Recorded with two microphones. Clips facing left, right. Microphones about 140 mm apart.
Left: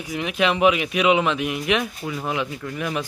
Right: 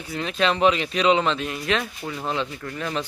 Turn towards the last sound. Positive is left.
turn(degrees=10)  # may be behind; listen again after turning